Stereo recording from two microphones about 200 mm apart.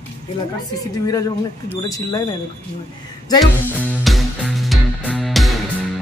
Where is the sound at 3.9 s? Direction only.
Centre (ahead or behind).